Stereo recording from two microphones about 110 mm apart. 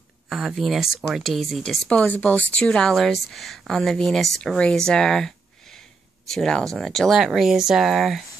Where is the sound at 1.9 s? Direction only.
15° left (ahead or behind); by 8.2 s centre (ahead or behind).